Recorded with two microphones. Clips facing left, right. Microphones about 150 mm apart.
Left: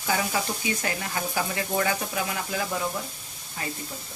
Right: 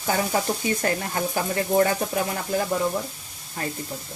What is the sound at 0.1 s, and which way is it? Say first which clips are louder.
Speech: right 3 dB; 45° right (ahead or behind).